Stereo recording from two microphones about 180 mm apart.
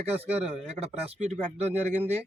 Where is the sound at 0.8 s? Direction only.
35° right (ahead or behind).